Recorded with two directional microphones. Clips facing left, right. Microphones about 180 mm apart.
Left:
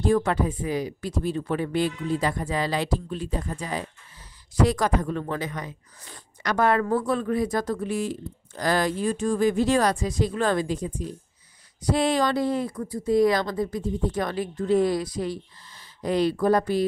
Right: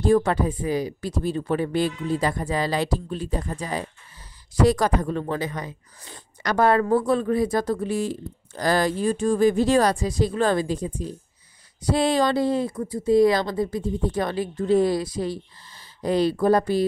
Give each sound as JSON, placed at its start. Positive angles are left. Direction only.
{"t": 0.0, "sound": "speech", "side_deg": -35}